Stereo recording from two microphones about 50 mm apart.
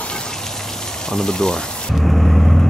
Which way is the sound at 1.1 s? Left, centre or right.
Centre.